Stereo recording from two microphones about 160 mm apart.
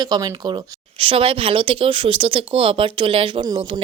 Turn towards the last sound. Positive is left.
turn(degrees=-35)  # may be behind; listen again after turning